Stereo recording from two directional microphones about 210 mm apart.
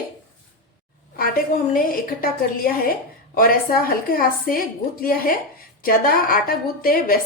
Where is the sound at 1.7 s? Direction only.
40° left (ahead or behind).